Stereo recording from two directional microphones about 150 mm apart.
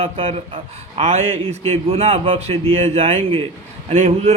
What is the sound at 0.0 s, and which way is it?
A man's voice, 40° right (ahead or behind).